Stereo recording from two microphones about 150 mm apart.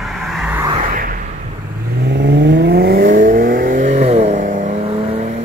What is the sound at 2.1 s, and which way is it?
Vehicle, 90° right.